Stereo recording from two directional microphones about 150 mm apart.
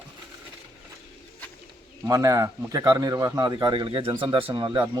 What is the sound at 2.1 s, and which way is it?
A man's voice, 20° right (ahead or behind).